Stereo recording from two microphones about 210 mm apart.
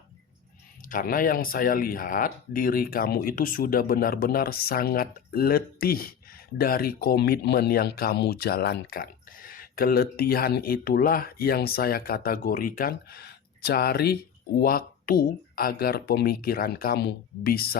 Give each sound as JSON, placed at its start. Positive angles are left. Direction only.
{"t": 0.8, "sound": "speech", "side_deg": 40}